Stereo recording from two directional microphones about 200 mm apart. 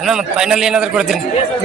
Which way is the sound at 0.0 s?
5° right (ahead or behind).